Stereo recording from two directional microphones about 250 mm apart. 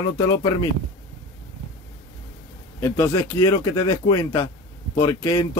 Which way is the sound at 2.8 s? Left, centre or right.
Centre.